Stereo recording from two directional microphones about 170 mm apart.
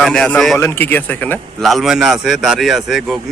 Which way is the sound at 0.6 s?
15° left (ahead or behind).